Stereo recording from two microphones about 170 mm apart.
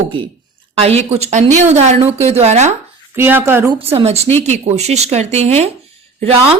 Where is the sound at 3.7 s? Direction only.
35° right (ahead or behind).